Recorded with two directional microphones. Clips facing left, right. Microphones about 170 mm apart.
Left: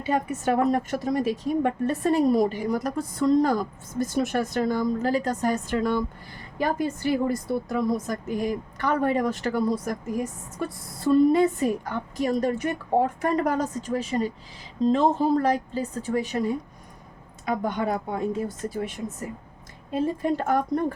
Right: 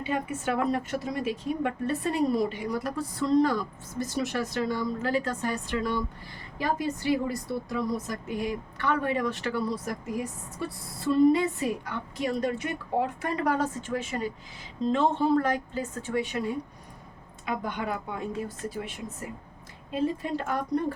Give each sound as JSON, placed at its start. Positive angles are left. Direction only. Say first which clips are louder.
{"t": 0.1, "sound": "a woman's voice", "louder": "left 6 dB", "side_deg": 40}
{"t": 17.4, "sound": "a woman's voice", "louder": "left 5 dB", "side_deg": 45}
{"t": 19.9, "sound": "a woman's voice", "louder": "left 4 dB", "side_deg": 45}